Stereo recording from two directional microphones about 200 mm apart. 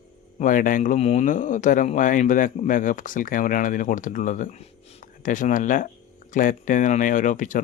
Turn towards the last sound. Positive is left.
turn(degrees=40)  # may be behind; listen again after turning